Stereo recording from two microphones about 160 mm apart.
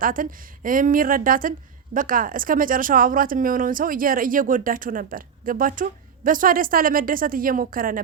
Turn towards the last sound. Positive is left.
turn(degrees=-60)  # may be behind; listen again after turning